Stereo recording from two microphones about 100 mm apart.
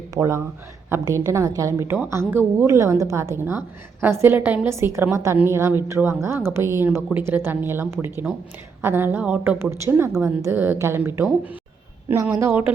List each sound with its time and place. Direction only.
0.1 s a man's voice: 30° right (ahead or behind)
10.1 s a woman's voice: 5° right (ahead or behind)
10.4 s a woman's voice: 20° right (ahead or behind)